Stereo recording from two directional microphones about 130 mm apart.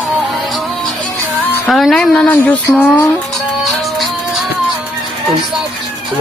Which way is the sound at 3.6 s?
Centre (ahead or behind).